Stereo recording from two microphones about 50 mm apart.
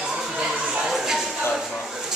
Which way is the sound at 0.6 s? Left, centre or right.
Centre.